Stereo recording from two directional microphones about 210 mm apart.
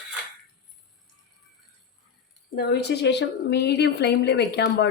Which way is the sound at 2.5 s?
50° left (ahead or behind).